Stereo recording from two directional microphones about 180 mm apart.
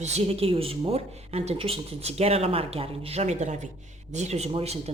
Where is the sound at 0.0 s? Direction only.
35° right (ahead or behind).